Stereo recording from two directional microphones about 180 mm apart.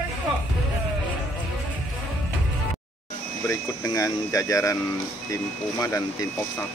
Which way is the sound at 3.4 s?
20° left (ahead or behind).